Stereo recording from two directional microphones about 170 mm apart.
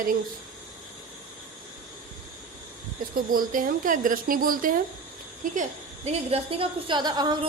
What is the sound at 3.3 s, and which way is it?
A woman's voice, 55° right (ahead or behind).